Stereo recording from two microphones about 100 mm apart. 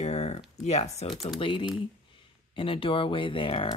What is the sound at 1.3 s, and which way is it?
Speech, 60° left (ahead or behind).